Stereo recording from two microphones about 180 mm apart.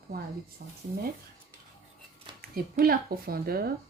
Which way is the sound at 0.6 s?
55° right (ahead or behind).